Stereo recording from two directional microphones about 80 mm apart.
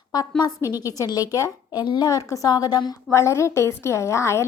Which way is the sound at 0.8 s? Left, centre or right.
Left.